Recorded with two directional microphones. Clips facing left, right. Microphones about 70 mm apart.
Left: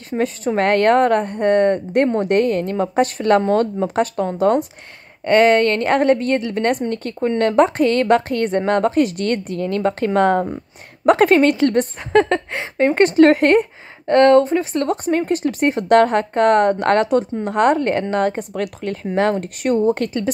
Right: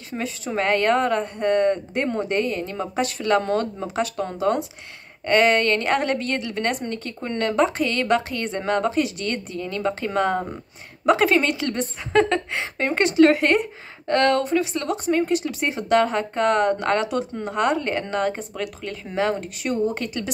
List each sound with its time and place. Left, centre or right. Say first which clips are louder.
0.1 s speech: left 9 dB; centre
0.6 s speech: left 5 dB; left
5.2 s a woman's voice: left 5 dB; left
18.4 s speech: left 6 dB; left